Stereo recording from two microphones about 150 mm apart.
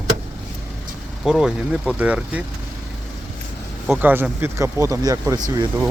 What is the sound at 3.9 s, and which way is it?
Speech, 10° right (ahead or behind).